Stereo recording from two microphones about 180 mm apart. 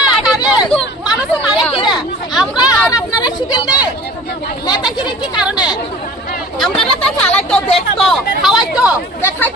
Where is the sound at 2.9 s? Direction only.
20° left (ahead or behind).